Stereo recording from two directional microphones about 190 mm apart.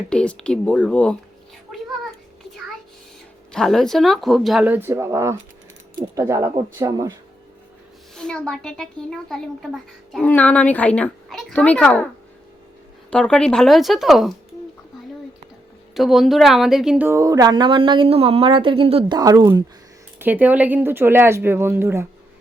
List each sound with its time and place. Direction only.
0.1 s a woman's voice: 5° left (ahead or behind)
3.5 s a woman's voice: centre (ahead or behind); by 7.1 s 20° right (ahead or behind)
8.1 s a woman's voice: 5° left (ahead or behind)
13.1 s a woman's voice: 5° left (ahead or behind)
16.0 s a woman's voice: centre (ahead or behind)
17.1 s speech: 15° right (ahead or behind)
20.1 s speech: 10° right (ahead or behind)